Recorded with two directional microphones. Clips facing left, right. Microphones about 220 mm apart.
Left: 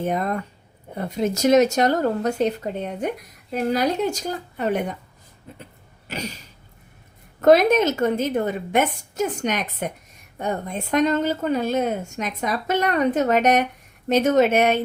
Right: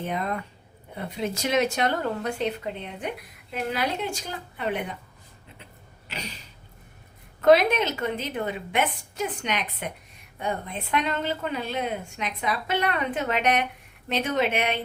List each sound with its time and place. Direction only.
0.0 s speech: 45° left (ahead or behind)
6.1 s a sound: 45° left (ahead or behind)
7.4 s speech: 45° left (ahead or behind)